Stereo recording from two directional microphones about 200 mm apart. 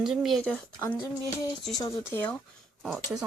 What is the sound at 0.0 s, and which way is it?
Speech, centre (ahead or behind).